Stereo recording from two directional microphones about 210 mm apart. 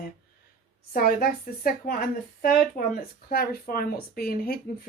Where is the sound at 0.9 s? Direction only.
45° left (ahead or behind).